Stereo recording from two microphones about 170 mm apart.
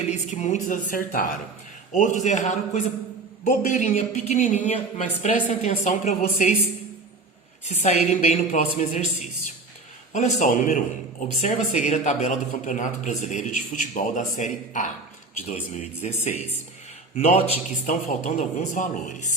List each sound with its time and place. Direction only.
0.1 s speech: 45° left (ahead or behind)
7.6 s a woman's voice: 40° left (ahead or behind)
10.1 s a woman's voice: 45° left (ahead or behind)